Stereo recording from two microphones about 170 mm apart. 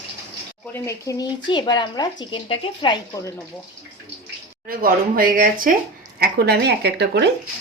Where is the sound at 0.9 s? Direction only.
20° left (ahead or behind).